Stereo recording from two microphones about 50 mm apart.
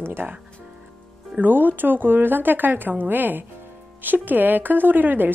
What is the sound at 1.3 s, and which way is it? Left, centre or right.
Speech, right.